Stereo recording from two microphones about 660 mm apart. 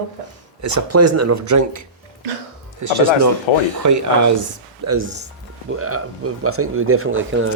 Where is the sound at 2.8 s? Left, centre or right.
Right.